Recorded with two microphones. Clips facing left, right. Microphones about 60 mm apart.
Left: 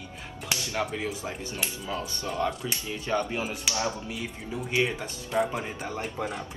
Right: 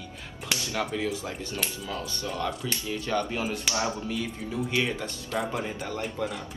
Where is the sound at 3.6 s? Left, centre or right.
Right.